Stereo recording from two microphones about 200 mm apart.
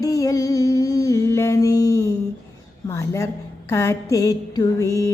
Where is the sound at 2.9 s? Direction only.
15° left (ahead or behind).